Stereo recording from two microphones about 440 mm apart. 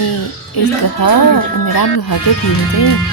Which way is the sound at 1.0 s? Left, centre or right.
Left.